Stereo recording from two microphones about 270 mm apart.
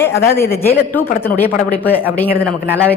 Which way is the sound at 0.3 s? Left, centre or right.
Centre.